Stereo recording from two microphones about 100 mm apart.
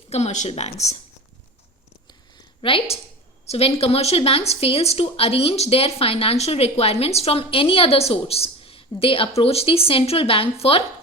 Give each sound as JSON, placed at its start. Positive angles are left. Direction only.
{"t": 0.1, "sound": "speech", "side_deg": 90}
{"t": 2.6, "sound": "a woman's voice", "side_deg": 65}
{"t": 3.4, "sound": "speech", "side_deg": 85}